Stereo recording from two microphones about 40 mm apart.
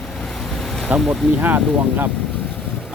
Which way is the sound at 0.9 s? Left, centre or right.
Right.